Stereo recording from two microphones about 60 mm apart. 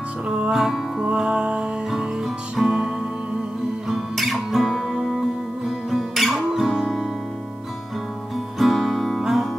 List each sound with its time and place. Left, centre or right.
0.3 s music: centre
1.0 s music: centre
3.9 s music: centre
8.5 s music: centre